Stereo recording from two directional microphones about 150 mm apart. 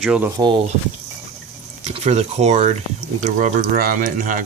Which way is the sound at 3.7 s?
70° right (ahead or behind).